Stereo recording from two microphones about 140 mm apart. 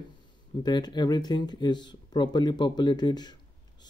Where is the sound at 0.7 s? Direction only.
30° left (ahead or behind).